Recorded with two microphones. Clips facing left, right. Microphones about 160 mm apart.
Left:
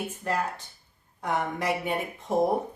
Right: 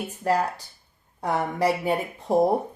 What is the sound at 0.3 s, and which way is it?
Speech, 35° right (ahead or behind).